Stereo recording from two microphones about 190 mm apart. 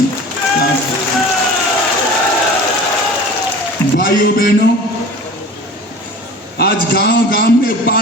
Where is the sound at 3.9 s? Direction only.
50° left (ahead or behind).